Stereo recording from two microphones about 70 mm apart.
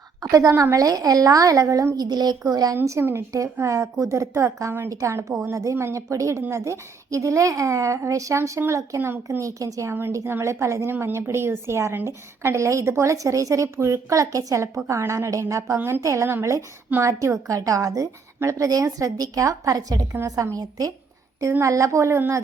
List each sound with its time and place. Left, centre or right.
0.2 s a woman's voice: right
2.0 s speech: right
2.4 s a woman's voice: right
3.0 s a woman's voice: right
9.9 s a woman's voice: right
20.6 s a woman's voice: right
21.6 s a woman's voice: right